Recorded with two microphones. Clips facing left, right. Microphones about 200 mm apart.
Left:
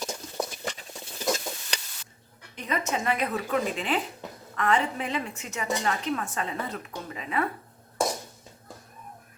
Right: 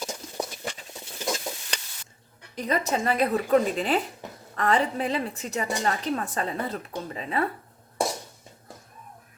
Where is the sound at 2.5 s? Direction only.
35° right (ahead or behind).